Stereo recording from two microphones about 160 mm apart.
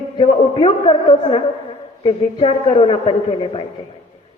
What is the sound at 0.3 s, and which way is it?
A man's voice, 35° left (ahead or behind).